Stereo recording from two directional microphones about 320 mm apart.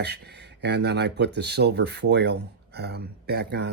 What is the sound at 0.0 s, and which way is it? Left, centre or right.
Speech, right.